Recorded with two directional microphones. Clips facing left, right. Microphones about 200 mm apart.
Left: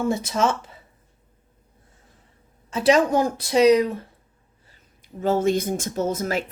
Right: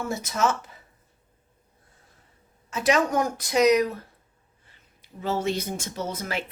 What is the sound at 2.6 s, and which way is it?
Speech, 30° left (ahead or behind).